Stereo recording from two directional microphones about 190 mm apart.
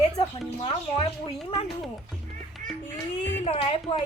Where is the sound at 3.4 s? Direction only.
30° left (ahead or behind).